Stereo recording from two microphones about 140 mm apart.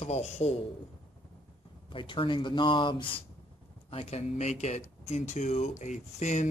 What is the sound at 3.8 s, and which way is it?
Speech, 45° left (ahead or behind).